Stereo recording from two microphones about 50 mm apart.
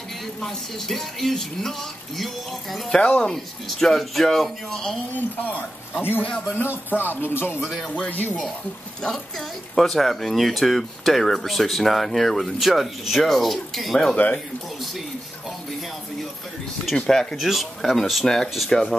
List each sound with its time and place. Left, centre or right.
0.4 s speech: centre
2.9 s speech: left
3.3 s speech: centre
5.1 s speech: left
6.4 s speech: left
9.8 s speech: centre
14.2 s speech: left
17.1 s speech: centre
17.4 s speech: centre